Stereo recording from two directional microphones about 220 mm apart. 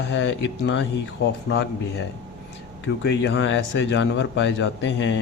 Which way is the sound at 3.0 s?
50° left (ahead or behind).